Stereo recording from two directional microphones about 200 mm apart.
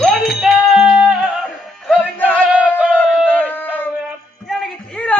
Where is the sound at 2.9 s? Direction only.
Centre (ahead or behind).